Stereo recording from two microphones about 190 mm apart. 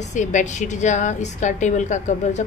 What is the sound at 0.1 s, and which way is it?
A woman's voice, 40° left (ahead or behind).